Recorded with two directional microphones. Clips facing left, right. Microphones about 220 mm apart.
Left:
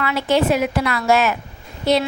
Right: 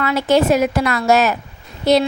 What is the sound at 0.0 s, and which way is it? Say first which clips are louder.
A woman's voice: right 3 dB; 45° right (ahead or behind).